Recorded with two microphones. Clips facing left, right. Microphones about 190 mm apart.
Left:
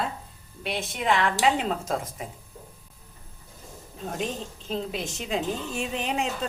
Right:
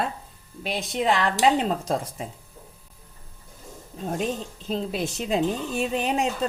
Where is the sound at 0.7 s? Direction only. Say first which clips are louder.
Right 2 dB; 35° right (ahead or behind).